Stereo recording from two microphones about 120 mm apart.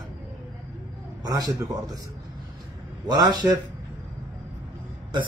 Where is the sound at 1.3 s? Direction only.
30° right (ahead or behind).